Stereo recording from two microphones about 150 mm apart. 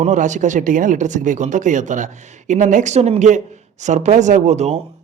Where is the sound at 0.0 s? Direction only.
55° right (ahead or behind).